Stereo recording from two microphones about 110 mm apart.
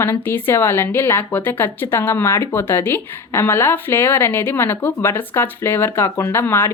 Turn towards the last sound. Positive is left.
turn(degrees=25)  # may be behind; listen again after turning